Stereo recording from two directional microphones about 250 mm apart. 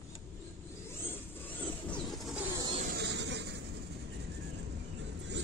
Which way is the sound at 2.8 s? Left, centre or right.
Right.